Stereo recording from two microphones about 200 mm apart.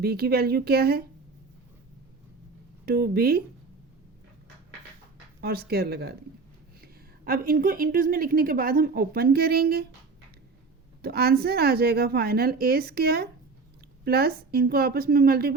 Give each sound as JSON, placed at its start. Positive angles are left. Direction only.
{"t": 0.0, "sound": "a woman's voice", "side_deg": -50}
{"t": 2.8, "sound": "a woman's voice", "side_deg": -50}
{"t": 5.4, "sound": "a woman's voice", "side_deg": -50}
{"t": 11.0, "sound": "a woman's voice", "side_deg": -50}